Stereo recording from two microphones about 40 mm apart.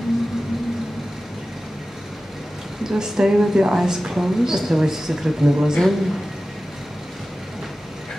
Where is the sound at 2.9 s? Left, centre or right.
Centre.